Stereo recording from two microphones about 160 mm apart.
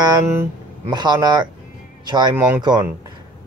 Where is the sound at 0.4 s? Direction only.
25° right (ahead or behind).